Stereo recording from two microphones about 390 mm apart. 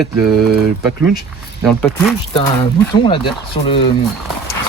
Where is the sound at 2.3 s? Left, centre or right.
Centre.